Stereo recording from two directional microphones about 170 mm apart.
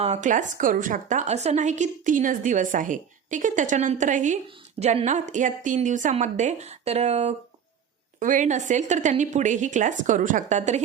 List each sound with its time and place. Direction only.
0.0 s a woman's voice: 45° right (ahead or behind)